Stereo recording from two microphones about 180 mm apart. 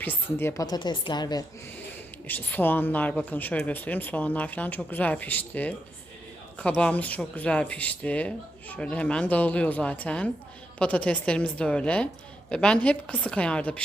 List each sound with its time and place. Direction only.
0.0 s a woman's voice: 10° left (ahead or behind)
2.2 s a woman's voice: 10° left (ahead or behind)